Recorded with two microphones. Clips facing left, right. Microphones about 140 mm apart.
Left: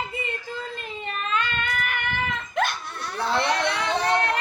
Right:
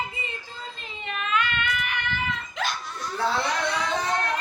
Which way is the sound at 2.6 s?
55° left (ahead or behind).